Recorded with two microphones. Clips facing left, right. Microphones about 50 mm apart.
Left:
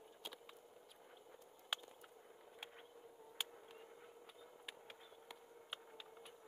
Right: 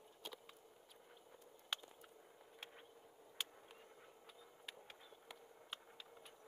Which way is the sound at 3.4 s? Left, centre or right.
Centre.